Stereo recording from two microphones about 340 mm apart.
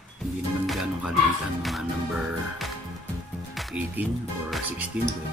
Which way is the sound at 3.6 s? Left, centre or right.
Centre.